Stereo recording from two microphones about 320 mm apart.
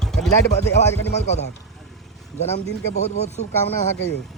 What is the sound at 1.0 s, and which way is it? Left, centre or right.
Speech, left.